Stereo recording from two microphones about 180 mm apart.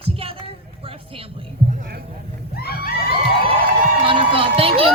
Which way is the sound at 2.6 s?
60° left (ahead or behind).